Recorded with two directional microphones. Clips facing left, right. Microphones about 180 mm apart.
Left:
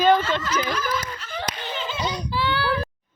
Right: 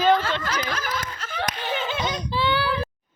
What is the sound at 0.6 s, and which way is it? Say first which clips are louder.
Laughter: left 3 dB; 50° right (ahead or behind).